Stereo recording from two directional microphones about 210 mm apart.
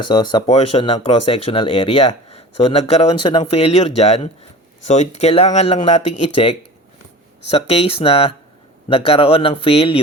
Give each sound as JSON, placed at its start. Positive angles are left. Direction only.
{"t": 0.0, "sound": "speech", "side_deg": 20}
{"t": 7.5, "sound": "speech", "side_deg": 30}